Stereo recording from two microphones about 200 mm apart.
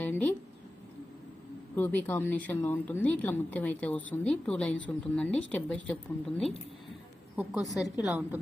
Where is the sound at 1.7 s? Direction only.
10° left (ahead or behind).